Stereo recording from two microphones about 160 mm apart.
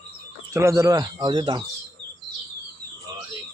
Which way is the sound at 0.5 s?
20° right (ahead or behind).